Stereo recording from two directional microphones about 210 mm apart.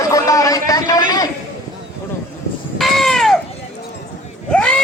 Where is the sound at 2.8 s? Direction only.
Centre (ahead or behind).